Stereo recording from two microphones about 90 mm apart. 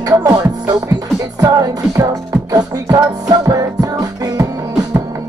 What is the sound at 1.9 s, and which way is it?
Music, 40° right (ahead or behind).